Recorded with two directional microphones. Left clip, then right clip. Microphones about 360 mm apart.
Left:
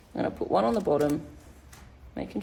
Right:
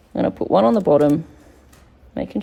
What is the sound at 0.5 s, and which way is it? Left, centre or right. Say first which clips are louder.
Speech: right 10 dB; right.